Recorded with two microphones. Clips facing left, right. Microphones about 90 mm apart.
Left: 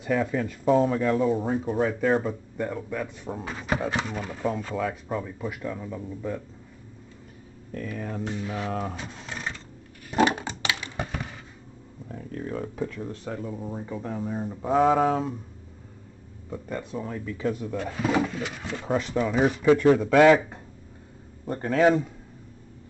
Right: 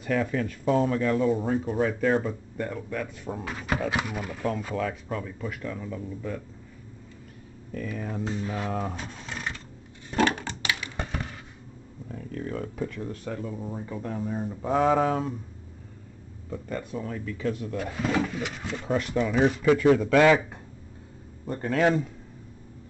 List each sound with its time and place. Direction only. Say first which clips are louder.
0.0 s speech: left 1 dB; 10° left (ahead or behind)
3.9 s speech: even; 10° right (ahead or behind)
4.7 s speech: left 1 dB; 10° left (ahead or behind)
7.9 s speech: left 1 dB; centre (ahead or behind)
8.2 s a sound: right 2 dB; 20° right (ahead or behind)
8.5 s speech: even; 15° left (ahead or behind)
8.7 s speech: even; centre (ahead or behind)
10.1 s coin: left 2 dB; 15° left (ahead or behind)
10.6 s typing: right 1 dB; 30° left (ahead or behind)
12.1 s speech: even; 5° left (ahead or behind)
16.4 s speech: even; 5° left (ahead or behind)
17.7 s speech: left 2 dB; centre (ahead or behind)
18.7 s speech: left 1 dB; 15° left (ahead or behind)
21.5 s speech: left 3 dB; 10° left (ahead or behind)